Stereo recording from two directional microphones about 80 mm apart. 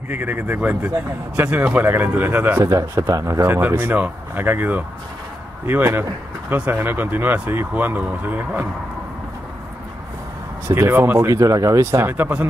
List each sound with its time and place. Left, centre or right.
0.1 s speech: right
1.9 s speech: right
2.6 s speech: right
3.4 s speech: right
10.7 s speech: right
11.1 s speech: right